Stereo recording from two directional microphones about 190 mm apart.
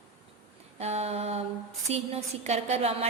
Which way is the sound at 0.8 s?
35° right (ahead or behind).